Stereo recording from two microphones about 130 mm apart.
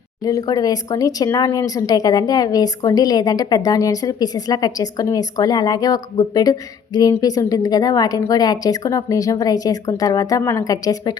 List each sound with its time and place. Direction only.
0.3 s speech: 30° left (ahead or behind)